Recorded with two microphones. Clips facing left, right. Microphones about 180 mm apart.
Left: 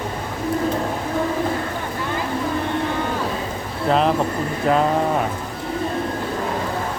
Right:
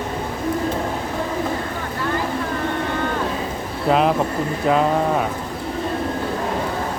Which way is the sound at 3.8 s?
5° right (ahead or behind).